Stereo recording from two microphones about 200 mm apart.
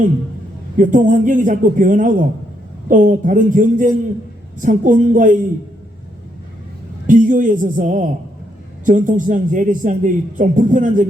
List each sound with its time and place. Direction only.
0.8 s a man's voice: 40° right (ahead or behind)
7.1 s a man's voice: 40° right (ahead or behind)